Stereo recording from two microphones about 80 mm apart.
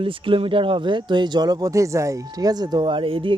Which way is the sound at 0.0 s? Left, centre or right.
Right.